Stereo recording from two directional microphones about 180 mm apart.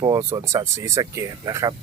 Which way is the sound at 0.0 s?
20° right (ahead or behind).